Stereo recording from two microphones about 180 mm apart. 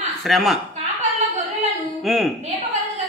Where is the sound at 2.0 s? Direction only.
Centre (ahead or behind).